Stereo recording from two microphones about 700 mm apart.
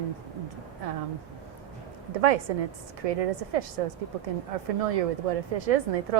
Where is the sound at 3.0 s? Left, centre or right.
Right.